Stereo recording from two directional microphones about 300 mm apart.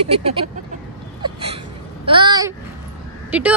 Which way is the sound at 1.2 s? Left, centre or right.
Centre.